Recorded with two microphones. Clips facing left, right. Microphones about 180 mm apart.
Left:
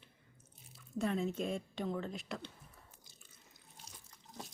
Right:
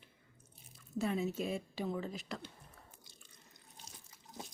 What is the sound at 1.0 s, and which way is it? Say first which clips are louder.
A woman's voice: even; 5° right (ahead or behind).